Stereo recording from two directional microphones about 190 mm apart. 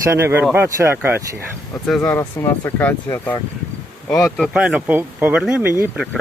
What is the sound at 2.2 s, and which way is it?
Speech, 15° left (ahead or behind).